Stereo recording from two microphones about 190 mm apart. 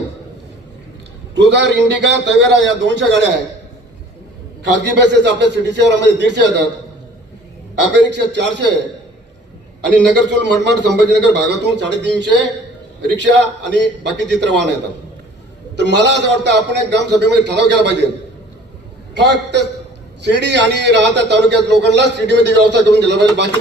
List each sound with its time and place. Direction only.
1.4 s a man's voice: 65° right (ahead or behind)
4.6 s a man's voice: 65° right (ahead or behind)
7.8 s a man's voice: 65° right (ahead or behind)
9.9 s a man's voice: 65° right (ahead or behind)
19.1 s a man's voice: 65° right (ahead or behind)